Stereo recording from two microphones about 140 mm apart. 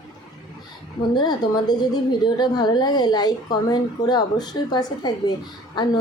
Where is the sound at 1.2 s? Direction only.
30° left (ahead or behind).